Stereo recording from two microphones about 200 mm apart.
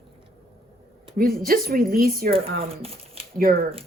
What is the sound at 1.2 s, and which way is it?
Speech, 45° right (ahead or behind).